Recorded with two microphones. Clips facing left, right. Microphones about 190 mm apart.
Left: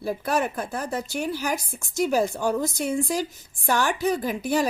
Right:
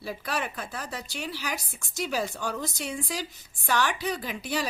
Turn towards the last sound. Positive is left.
turn(degrees=50)  # may be behind; listen again after turning